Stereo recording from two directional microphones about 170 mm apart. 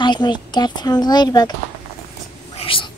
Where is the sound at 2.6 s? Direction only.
30° left (ahead or behind).